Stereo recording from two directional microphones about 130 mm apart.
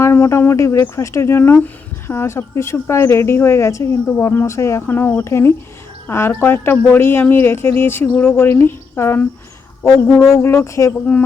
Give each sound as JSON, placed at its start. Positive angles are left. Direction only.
{"t": 0.0, "sound": "speech", "side_deg": 20}
{"t": 10.3, "sound": "speech", "side_deg": 20}